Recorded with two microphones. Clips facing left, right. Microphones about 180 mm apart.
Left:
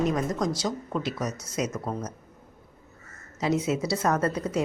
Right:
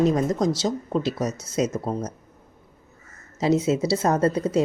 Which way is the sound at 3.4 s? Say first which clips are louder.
Right 5 dB; 30° right (ahead or behind).